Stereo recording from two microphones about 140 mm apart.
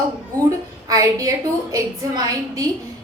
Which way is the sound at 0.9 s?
25° right (ahead or behind).